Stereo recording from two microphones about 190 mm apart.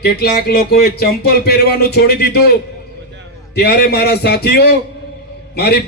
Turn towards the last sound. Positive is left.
turn(degrees=60)  # may be behind; listen again after turning